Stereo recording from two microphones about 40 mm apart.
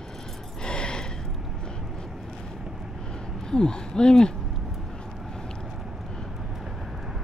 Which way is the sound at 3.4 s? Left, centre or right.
Centre.